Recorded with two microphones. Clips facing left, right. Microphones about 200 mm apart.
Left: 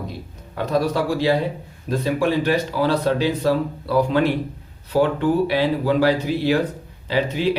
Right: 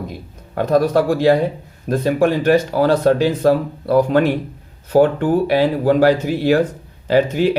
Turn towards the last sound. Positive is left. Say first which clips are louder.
# right 6 dB
turn(degrees=-50)  # may be behind; listen again after turning